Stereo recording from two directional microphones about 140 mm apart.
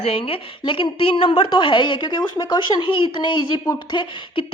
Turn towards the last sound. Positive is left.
turn(degrees=35)  # may be behind; listen again after turning